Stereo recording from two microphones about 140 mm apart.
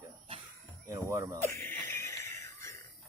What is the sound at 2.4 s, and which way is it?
Music, 20° left (ahead or behind).